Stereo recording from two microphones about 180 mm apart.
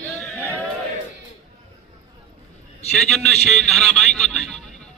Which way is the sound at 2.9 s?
5° left (ahead or behind).